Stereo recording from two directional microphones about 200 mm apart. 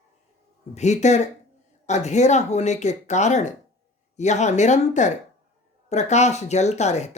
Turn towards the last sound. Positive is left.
turn(degrees=35)  # may be behind; listen again after turning